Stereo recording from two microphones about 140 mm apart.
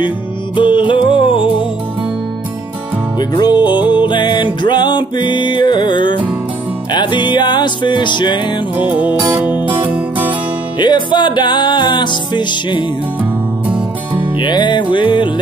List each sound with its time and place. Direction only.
0.6 s music: 35° left (ahead or behind)
3.2 s music: 30° left (ahead or behind)
8.7 s music: 10° right (ahead or behind)
10.8 s music: 35° left (ahead or behind)
13.2 s music: 10° right (ahead or behind)
14.3 s music: 35° left (ahead or behind)